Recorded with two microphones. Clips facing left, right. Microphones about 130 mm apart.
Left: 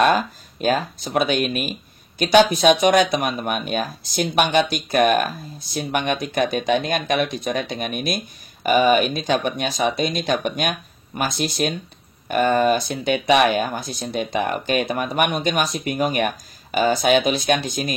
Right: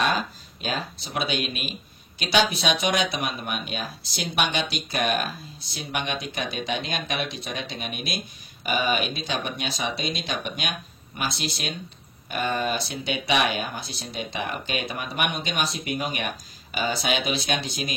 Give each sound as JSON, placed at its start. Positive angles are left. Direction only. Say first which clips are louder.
{"t": 0.0, "sound": "speech", "louder": "left 7 dB", "side_deg": 50}